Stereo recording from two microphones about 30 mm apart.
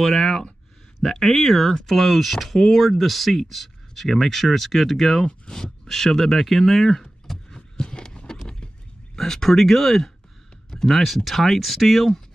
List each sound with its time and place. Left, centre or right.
0.0 s speech: centre
7.7 s a sound: left
9.1 s speech: centre